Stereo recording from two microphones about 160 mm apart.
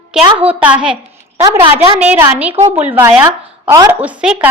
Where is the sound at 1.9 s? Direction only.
5° right (ahead or behind).